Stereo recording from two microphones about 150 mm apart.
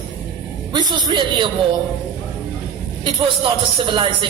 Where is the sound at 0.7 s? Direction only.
30° right (ahead or behind).